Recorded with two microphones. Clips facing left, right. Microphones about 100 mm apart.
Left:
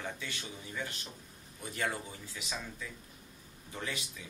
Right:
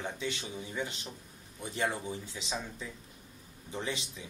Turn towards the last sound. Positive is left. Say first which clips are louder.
# right 3 dB
turn(degrees=-25)  # may be behind; listen again after turning